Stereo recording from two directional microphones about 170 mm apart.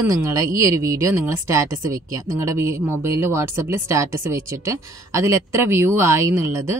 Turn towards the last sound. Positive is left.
turn(degrees=-15)  # may be behind; listen again after turning